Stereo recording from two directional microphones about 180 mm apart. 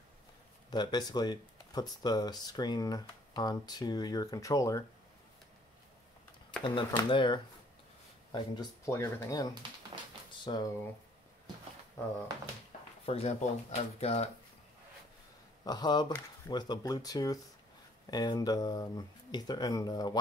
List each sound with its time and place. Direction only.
0.7 s speech: 25° left (ahead or behind)
6.6 s speech: 25° left (ahead or behind)
13.0 s speech: 35° left (ahead or behind)
15.6 s speech: 20° left (ahead or behind)